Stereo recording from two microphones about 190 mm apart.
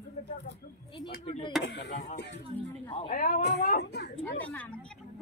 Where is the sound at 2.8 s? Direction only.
30° left (ahead or behind).